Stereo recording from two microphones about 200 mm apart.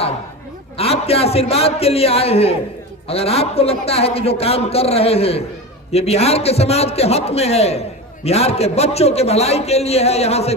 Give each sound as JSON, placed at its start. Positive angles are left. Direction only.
{"t": 0.7, "sound": "a man's voice", "side_deg": 30}